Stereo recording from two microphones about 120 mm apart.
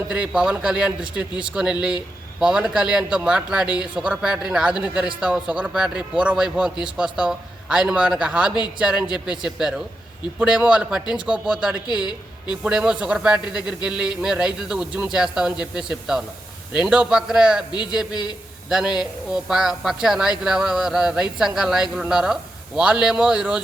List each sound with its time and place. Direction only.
0.1 s speech: 10° right (ahead or behind)
11.9 s a woman's voice: 40° left (ahead or behind)
12.5 s speech: 10° right (ahead or behind)
19.3 s a man's voice: 5° right (ahead or behind)